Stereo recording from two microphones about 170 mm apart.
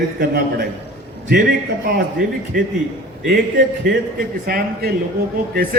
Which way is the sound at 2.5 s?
55° right (ahead or behind).